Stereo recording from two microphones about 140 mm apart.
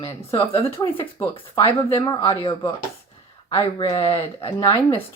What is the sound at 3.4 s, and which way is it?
Speech, 35° left (ahead or behind).